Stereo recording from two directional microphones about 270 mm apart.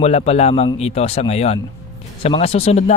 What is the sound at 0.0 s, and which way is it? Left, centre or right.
Speech, left.